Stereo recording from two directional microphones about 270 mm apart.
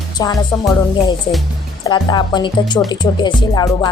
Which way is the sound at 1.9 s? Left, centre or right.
Centre.